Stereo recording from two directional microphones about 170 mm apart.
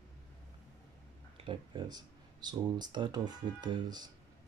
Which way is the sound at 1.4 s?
30° right (ahead or behind).